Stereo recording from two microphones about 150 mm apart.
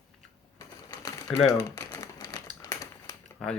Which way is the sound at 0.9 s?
20° left (ahead or behind).